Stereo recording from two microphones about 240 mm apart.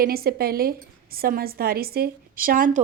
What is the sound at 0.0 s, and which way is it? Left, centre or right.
A woman's voice, right.